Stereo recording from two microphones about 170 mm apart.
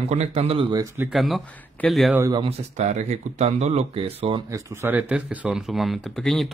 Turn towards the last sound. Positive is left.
turn(degrees=0)  # may be behind; listen again after turning